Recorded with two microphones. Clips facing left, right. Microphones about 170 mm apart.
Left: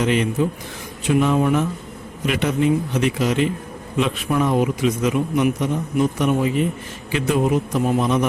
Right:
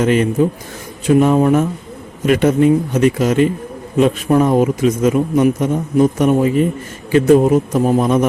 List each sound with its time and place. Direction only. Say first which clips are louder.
0.0 s a man's voice: right 6 dB; 45° right (ahead or behind)